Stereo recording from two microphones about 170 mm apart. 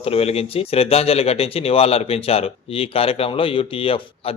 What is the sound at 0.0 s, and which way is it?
Speech, 35° left (ahead or behind).